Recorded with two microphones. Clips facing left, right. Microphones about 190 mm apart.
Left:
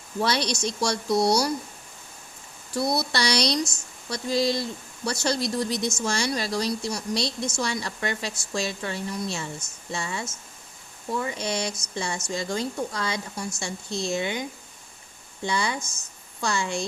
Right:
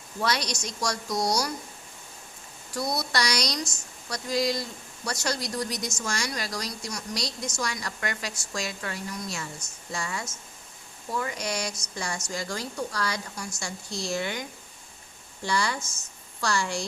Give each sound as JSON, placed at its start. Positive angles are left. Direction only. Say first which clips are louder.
{"t": 0.2, "sound": "speech", "louder": "left 4 dB", "side_deg": 30}
{"t": 2.7, "sound": "speech", "louder": "left 3 dB", "side_deg": 30}
{"t": 15.4, "sound": "speech", "louder": "left 1 dB", "side_deg": 20}